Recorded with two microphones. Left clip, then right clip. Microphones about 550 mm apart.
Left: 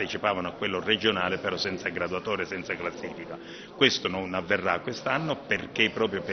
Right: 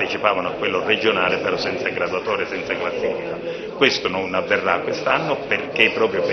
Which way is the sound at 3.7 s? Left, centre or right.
Left.